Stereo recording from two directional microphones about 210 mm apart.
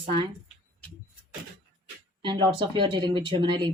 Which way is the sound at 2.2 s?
20° right (ahead or behind).